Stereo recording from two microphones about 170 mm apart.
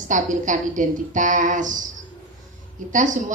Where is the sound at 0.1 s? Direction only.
50° right (ahead or behind).